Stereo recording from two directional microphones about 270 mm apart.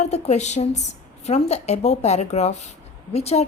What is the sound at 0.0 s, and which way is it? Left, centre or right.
A woman's voice, left.